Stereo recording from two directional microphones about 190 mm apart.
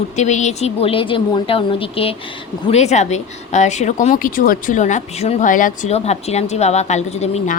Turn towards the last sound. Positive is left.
turn(degrees=35)  # may be behind; listen again after turning